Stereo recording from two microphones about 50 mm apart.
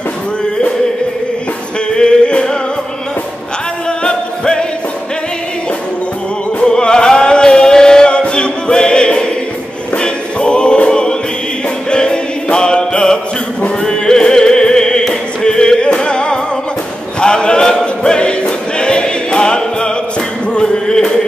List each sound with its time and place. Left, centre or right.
2.0 s music: centre
4.0 s music: centre
6.6 s music: centre
9.9 s choir: centre
11.9 s music: centre
17.2 s choir: centre